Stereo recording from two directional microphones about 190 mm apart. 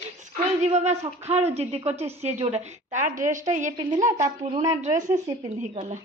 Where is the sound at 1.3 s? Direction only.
35° right (ahead or behind).